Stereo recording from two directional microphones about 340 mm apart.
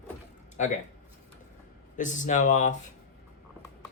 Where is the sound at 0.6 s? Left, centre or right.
Left.